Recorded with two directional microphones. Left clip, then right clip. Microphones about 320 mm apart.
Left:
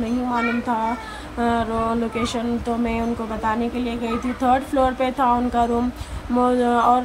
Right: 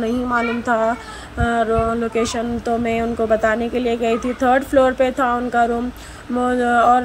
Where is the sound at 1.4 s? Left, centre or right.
Centre.